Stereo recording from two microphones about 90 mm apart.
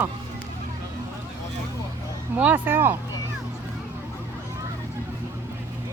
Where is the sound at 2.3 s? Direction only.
20° right (ahead or behind).